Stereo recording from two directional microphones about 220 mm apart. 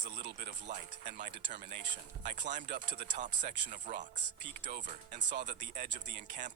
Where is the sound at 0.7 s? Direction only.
35° right (ahead or behind).